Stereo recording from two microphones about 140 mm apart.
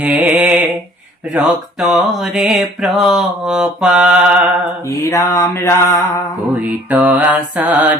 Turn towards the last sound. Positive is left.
turn(degrees=-10)  # may be behind; listen again after turning